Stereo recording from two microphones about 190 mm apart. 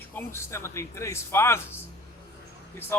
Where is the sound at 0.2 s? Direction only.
15° left (ahead or behind).